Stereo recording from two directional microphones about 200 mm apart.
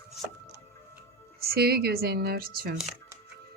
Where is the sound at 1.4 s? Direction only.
50° right (ahead or behind).